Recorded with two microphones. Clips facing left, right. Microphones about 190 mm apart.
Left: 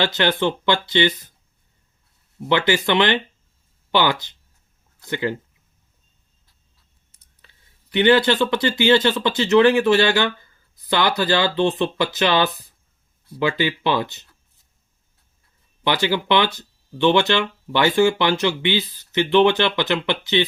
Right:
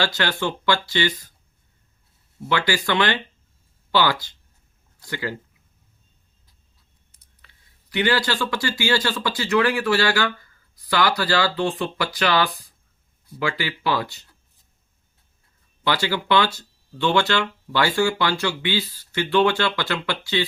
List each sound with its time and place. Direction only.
0.0 s speech: 20° left (ahead or behind)
2.5 s speech: 20° left (ahead or behind)
7.4 s speech: 25° left (ahead or behind)
15.8 s speech: 20° left (ahead or behind)